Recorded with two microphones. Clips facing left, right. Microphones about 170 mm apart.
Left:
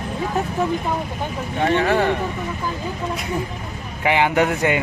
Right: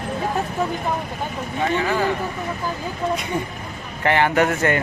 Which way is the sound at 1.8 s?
65° left (ahead or behind).